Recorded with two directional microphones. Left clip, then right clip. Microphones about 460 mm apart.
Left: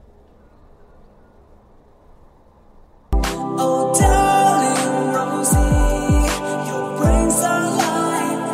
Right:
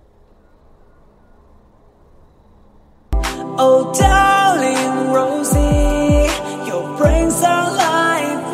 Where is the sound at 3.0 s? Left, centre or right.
Centre.